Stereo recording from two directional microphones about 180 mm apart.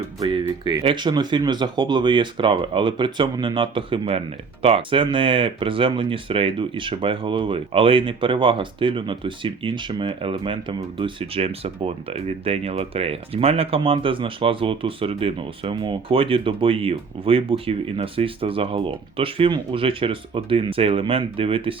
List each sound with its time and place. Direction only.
0.2 s speech: 25° right (ahead or behind)